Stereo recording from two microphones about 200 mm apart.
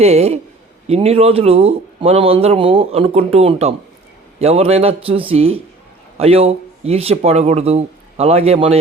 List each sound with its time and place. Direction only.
0.0 s a man's voice: 30° right (ahead or behind)